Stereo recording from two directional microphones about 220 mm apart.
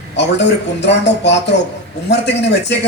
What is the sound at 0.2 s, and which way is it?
A woman's voice, 50° left (ahead or behind).